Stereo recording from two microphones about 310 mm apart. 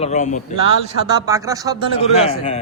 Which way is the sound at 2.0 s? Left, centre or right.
Centre.